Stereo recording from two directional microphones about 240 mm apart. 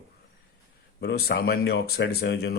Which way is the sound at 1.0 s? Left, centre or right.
Left.